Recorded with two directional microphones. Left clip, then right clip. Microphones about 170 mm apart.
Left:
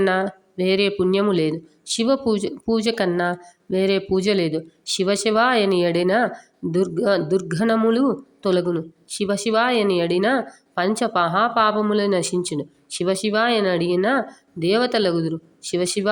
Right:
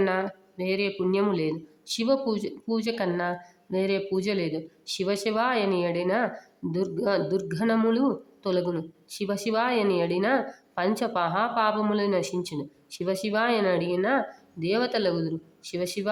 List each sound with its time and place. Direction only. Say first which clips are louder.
0.0 s speech: left 6 dB; 25° left (ahead or behind)